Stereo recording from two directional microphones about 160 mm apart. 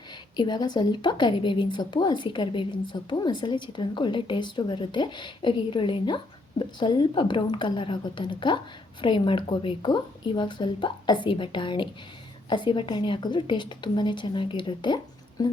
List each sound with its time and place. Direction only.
0.3 s a woman's voice: 25° left (ahead or behind)